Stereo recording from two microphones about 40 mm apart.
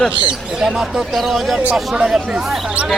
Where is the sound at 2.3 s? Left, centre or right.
Centre.